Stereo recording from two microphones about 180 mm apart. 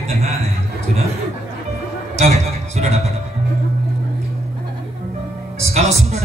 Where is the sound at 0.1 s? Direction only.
35° right (ahead or behind).